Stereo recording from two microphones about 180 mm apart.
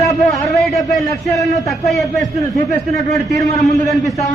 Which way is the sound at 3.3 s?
20° left (ahead or behind).